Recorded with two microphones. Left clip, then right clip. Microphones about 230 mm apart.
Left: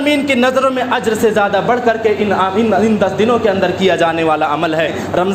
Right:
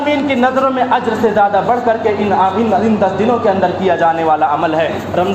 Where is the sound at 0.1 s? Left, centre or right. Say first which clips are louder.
Left 1 dB; left.